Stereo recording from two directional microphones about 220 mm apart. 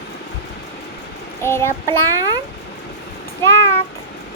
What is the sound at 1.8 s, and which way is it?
Speech, 15° right (ahead or behind).